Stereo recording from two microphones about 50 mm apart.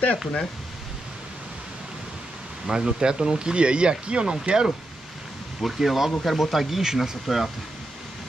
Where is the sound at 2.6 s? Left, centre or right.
Centre.